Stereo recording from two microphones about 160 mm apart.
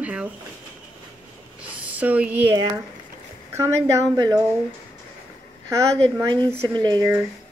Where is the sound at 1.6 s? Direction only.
10° right (ahead or behind).